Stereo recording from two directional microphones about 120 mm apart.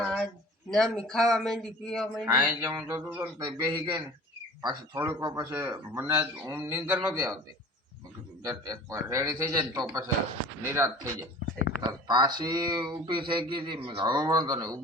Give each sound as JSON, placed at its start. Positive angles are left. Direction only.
{"t": 0.0, "sound": "a sound", "side_deg": 5}
{"t": 0.7, "sound": "speech", "side_deg": 5}
{"t": 2.2, "sound": "a man's voice", "side_deg": -25}
{"t": 3.3, "sound": "a man's voice", "side_deg": -40}
{"t": 8.4, "sound": "a man's voice", "side_deg": -30}
{"t": 11.9, "sound": "speech", "side_deg": -35}